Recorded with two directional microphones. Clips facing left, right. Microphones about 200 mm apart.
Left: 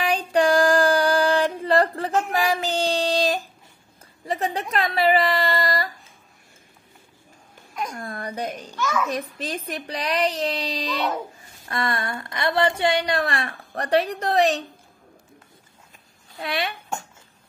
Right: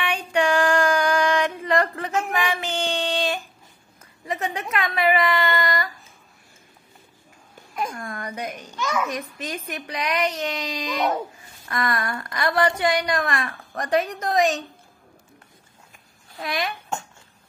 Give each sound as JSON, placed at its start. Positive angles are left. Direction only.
{"t": 0.0, "sound": "a sound", "side_deg": 35}
{"t": 4.3, "sound": "speech", "side_deg": 35}
{"t": 7.9, "sound": "speech", "side_deg": 35}
{"t": 16.4, "sound": "speech", "side_deg": 35}